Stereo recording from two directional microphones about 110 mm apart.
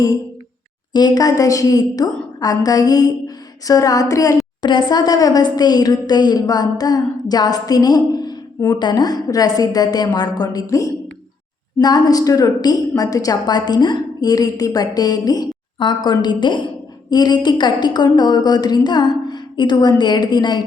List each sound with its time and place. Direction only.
0.9 s a woman's voice: 40° left (ahead or behind)
2.4 s a sound: 35° left (ahead or behind)
4.6 s a woman's voice: 40° left (ahead or behind)
11.8 s a woman's voice: 40° left (ahead or behind)